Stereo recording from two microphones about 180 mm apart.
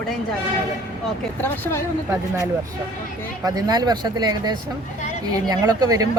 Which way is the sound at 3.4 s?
20° right (ahead or behind).